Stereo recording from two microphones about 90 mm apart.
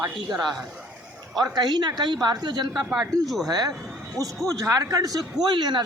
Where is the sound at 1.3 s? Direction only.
50° right (ahead or behind).